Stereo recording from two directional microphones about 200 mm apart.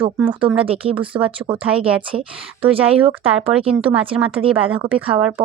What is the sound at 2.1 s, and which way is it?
Speech, 30° right (ahead or behind).